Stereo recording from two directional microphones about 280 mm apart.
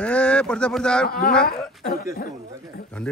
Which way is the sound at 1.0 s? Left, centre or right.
Left.